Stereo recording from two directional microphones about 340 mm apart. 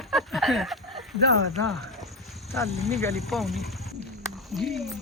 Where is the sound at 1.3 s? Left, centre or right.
Right.